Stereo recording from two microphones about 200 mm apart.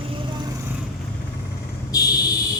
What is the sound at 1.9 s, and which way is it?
Fire alarm, 15° left (ahead or behind).